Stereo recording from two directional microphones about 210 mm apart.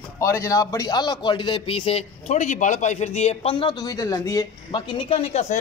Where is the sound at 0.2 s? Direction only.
15° left (ahead or behind).